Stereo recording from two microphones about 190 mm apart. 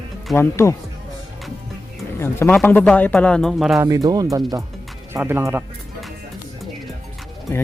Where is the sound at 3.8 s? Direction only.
20° right (ahead or behind).